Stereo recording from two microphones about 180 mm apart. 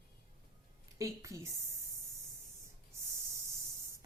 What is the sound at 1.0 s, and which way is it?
Speech, 15° right (ahead or behind).